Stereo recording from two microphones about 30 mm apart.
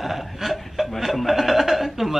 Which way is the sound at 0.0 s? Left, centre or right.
Centre.